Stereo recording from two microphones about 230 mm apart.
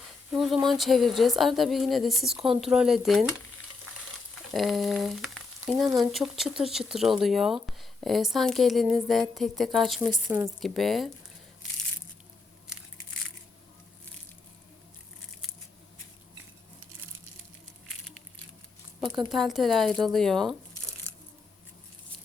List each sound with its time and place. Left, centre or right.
0.3 s speech: centre
4.5 s a sound: centre
6.0 s speech: centre
10.1 s speech: centre
10.6 s speech: centre
19.0 s a sound: centre
19.3 s speech: centre